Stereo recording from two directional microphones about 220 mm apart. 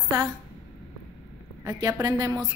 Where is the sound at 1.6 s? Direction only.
15° right (ahead or behind).